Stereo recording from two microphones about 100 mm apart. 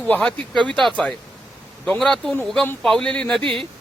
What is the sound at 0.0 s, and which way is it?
Speech, 15° left (ahead or behind).